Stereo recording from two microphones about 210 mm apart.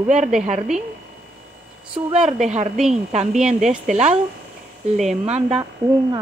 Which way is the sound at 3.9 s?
35° right (ahead or behind).